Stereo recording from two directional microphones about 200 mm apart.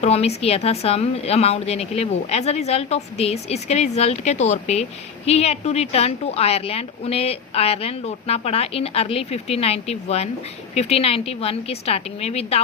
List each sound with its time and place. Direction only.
0.0 s speech: 30° left (ahead or behind)